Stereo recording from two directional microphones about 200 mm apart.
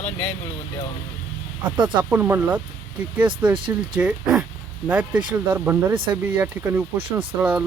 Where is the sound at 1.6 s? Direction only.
25° right (ahead or behind).